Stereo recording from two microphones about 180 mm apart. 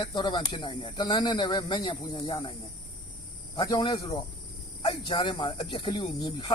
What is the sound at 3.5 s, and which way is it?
Speech, 25° left (ahead or behind).